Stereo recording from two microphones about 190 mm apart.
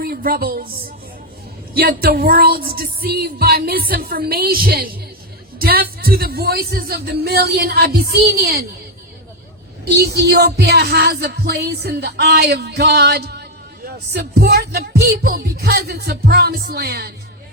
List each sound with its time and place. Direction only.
0.0 s music: 50° right (ahead or behind)
1.7 s music: 55° right (ahead or behind)
5.5 s speech: 55° right (ahead or behind)
9.9 s speech: 60° right (ahead or behind)